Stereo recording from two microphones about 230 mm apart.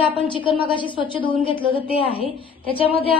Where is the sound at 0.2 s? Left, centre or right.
Left.